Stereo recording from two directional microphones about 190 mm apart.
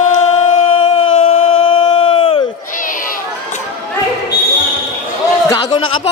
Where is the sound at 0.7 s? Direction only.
30° left (ahead or behind).